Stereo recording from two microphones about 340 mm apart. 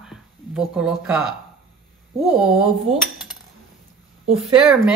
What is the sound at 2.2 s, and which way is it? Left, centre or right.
Speech, centre.